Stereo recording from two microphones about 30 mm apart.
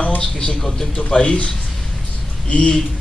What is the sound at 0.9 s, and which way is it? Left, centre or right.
Speech, left.